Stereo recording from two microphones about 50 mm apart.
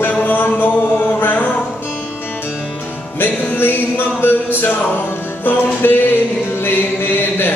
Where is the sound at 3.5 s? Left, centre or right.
Left.